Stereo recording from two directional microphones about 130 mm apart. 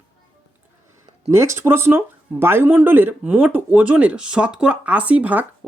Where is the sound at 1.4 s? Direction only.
20° right (ahead or behind).